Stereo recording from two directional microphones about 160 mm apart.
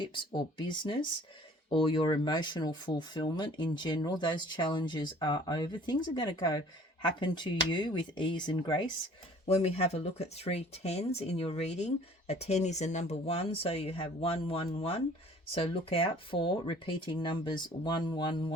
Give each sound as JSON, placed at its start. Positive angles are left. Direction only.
{"t": 0.0, "sound": "speech", "side_deg": 30}
{"t": 9.5, "sound": "speech", "side_deg": 40}